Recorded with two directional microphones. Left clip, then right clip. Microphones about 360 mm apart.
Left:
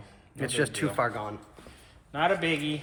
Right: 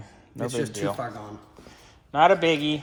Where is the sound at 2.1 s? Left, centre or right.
Centre.